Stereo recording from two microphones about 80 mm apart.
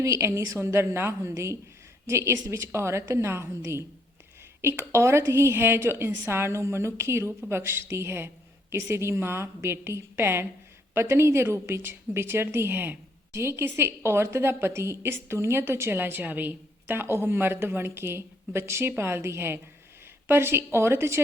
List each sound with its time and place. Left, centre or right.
0.0 s a woman's voice: right